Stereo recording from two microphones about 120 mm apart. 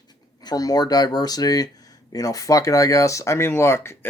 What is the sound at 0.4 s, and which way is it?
Speech, 30° left (ahead or behind).